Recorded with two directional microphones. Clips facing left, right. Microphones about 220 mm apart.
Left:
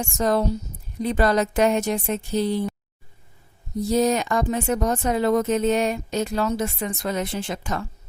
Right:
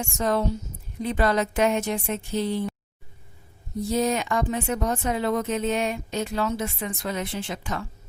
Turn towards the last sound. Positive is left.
turn(degrees=45)  # may be behind; listen again after turning